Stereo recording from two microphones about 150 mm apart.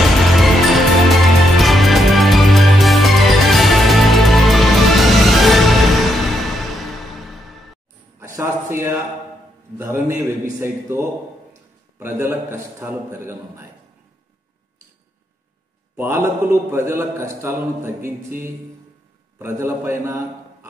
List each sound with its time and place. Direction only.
0.0 s music: centre (ahead or behind)
8.4 s a sound: 15° right (ahead or behind)
12.0 s a man's voice: 15° right (ahead or behind)
16.0 s a man's voice: 15° right (ahead or behind)